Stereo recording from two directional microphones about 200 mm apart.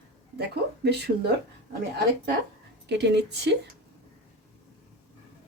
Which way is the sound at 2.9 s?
60° right (ahead or behind).